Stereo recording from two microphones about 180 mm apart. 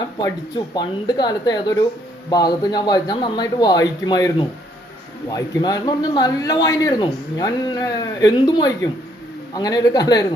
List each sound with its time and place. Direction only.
0.2 s a man's voice: 25° left (ahead or behind)